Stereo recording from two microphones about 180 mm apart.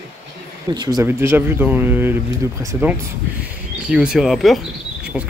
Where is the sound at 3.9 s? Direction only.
5° right (ahead or behind).